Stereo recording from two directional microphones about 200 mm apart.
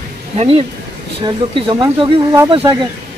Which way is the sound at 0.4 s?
30° right (ahead or behind).